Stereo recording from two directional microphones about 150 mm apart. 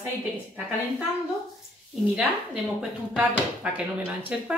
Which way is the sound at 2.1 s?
5° right (ahead or behind).